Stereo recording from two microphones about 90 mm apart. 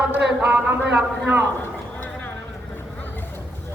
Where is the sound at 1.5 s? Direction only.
20° left (ahead or behind).